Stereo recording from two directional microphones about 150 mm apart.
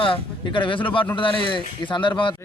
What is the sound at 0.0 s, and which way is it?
Speech, 35° left (ahead or behind).